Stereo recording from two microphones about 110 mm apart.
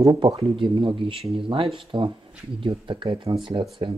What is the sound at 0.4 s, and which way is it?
Speech, 55° right (ahead or behind).